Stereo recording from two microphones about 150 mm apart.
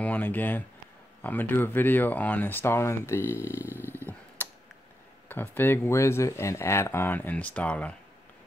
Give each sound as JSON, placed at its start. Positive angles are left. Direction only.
{"t": 0.0, "sound": "speech", "side_deg": 10}
{"t": 3.6, "sound": "roaring cats", "side_deg": -15}
{"t": 5.3, "sound": "speech", "side_deg": 15}